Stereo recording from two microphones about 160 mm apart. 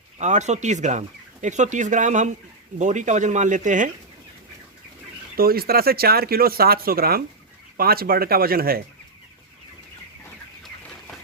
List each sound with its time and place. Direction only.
0.2 s speech: 45° right (ahead or behind)
5.4 s speech: 70° right (ahead or behind)